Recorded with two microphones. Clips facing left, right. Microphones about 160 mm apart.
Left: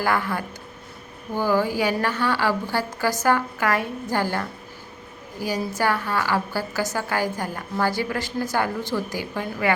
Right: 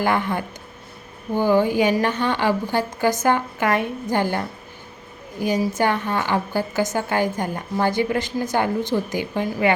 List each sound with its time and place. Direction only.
0.0 s a woman's voice: 20° right (ahead or behind)